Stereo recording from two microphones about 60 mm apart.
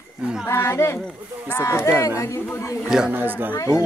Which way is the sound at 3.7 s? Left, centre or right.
Centre.